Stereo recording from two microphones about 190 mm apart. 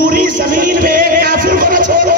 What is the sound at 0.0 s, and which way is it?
Music, 45° right (ahead or behind).